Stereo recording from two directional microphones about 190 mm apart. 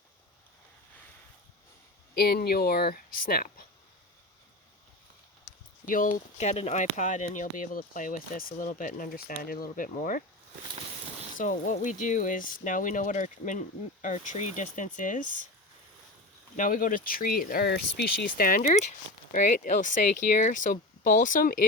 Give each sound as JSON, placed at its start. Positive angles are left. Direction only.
{"t": 2.1, "sound": "speech", "side_deg": 55}
{"t": 5.8, "sound": "speech", "side_deg": 45}
{"t": 11.3, "sound": "speech", "side_deg": 45}
{"t": 16.6, "sound": "speech", "side_deg": 45}